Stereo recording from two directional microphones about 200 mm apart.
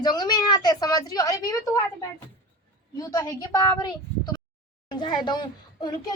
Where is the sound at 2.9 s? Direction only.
15° left (ahead or behind).